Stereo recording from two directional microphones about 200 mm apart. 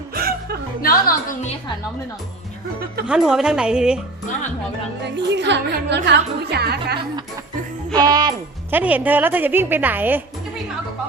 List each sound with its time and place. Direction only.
0.1 s music: 50° right (ahead or behind)
0.8 s a woman's voice: 45° left (ahead or behind)
3.1 s a woman's voice: 5° right (ahead or behind)
5.1 s a woman's voice: 60° right (ahead or behind)
7.9 s speech: 20° right (ahead or behind)
8.7 s a woman's voice: 10° right (ahead or behind)